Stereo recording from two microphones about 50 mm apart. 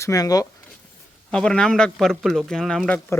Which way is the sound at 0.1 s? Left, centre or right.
Left.